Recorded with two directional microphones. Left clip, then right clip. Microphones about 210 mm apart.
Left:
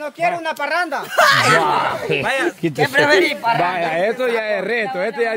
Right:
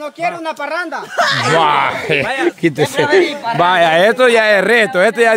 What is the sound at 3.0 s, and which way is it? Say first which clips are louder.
Speech: right 1 dB; 50° left (ahead or behind).